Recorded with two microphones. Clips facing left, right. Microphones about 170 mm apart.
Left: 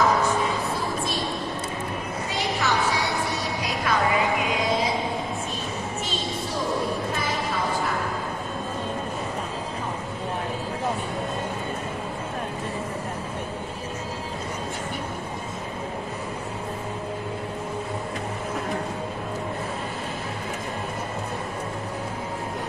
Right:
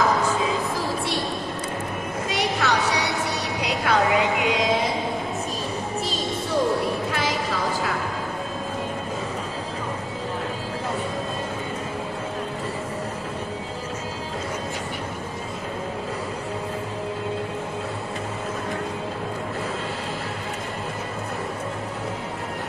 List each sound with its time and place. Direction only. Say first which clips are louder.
2.2 s vehicle: right 3 dB; 80° right